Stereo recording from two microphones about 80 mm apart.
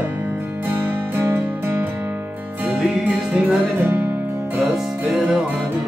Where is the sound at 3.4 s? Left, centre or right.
Right.